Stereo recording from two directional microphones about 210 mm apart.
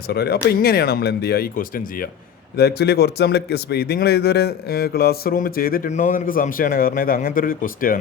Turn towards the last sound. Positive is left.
turn(degrees=40)  # may be behind; listen again after turning